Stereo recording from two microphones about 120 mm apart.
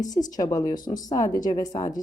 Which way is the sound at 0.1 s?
30° left (ahead or behind).